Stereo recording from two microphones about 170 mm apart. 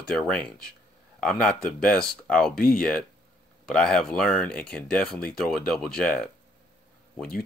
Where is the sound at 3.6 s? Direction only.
5° left (ahead or behind).